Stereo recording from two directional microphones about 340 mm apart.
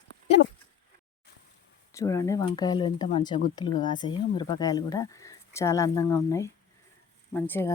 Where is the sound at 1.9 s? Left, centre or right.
Centre.